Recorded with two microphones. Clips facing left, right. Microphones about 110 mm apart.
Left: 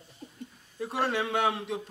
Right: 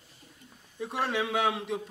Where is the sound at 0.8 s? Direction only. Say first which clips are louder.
Left 1 dB; centre (ahead or behind).